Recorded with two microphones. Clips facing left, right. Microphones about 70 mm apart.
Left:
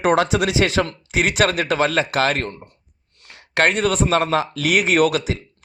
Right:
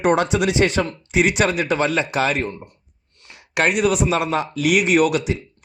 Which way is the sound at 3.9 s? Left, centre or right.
Left.